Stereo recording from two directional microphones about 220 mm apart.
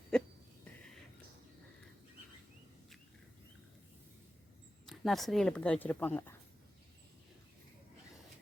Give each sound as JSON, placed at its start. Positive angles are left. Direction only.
{"t": 4.9, "sound": "speech", "side_deg": 0}